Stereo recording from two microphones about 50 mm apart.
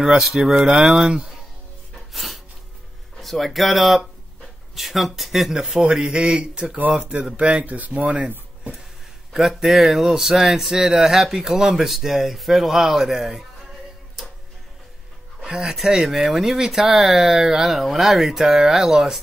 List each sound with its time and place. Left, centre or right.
0.0 s speech: centre
2.1 s a sound: centre
3.2 s speech: centre; by 8.3 s right
9.3 s speech: centre
15.4 s speech: centre